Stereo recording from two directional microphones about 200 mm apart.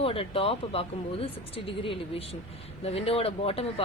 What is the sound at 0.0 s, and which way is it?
A woman's voice, 30° left (ahead or behind).